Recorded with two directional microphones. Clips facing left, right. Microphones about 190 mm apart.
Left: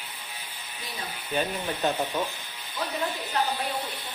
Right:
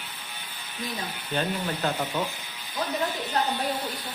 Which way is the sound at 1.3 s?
10° left (ahead or behind).